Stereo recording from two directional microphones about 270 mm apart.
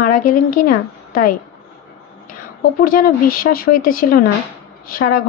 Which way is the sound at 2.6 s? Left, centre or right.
Left.